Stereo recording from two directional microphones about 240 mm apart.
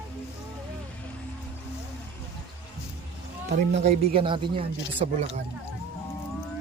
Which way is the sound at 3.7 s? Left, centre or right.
Right.